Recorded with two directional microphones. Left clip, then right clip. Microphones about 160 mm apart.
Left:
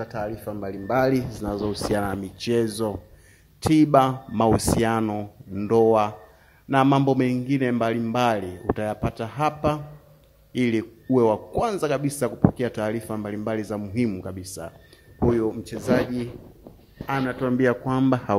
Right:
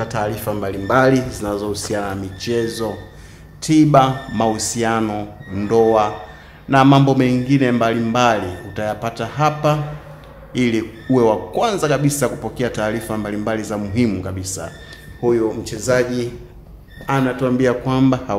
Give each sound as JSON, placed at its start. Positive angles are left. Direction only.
{"t": 0.0, "sound": "a man's voice", "side_deg": 20}
{"t": 5.0, "sound": "speech", "side_deg": 35}
{"t": 6.7, "sound": "a man's voice", "side_deg": 40}
{"t": 15.2, "sound": "speech", "side_deg": 60}
{"t": 17.8, "sound": "speech", "side_deg": 25}